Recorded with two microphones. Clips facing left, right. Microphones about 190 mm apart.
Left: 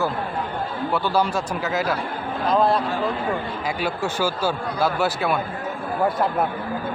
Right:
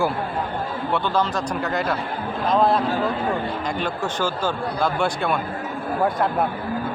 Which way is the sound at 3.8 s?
10° left (ahead or behind).